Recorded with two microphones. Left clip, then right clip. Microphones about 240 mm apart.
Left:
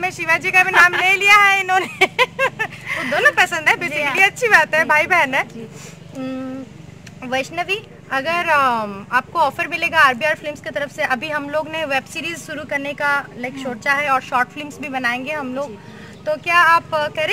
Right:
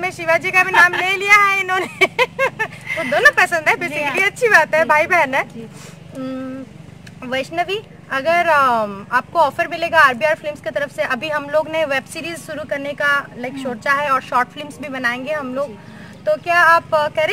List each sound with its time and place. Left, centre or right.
0.0 s speech: centre
6.1 s a sound: centre
7.2 s speech: centre